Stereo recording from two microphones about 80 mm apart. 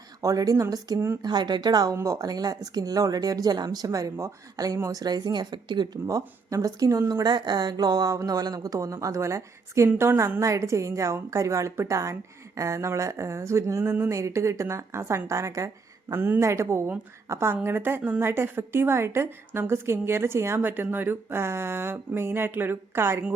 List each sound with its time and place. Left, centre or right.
0.2 s speech: right
0.9 s speech: right
1.2 s speech: right
2.0 s speech: right
6.1 s speech: right
7.1 s speech: right